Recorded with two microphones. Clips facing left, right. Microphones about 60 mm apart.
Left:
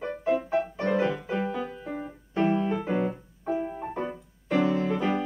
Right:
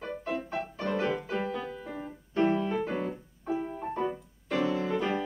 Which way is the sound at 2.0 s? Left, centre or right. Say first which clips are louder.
Even; centre.